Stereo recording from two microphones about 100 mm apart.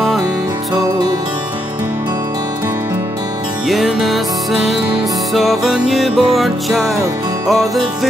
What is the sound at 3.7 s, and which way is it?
Music, centre (ahead or behind).